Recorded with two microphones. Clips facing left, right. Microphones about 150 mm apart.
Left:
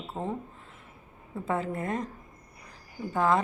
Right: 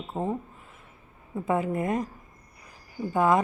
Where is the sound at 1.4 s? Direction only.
15° right (ahead or behind).